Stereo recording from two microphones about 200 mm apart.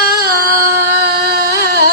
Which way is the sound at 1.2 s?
50° right (ahead or behind).